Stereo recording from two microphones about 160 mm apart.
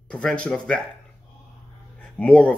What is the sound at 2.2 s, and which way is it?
Speech, 5° left (ahead or behind).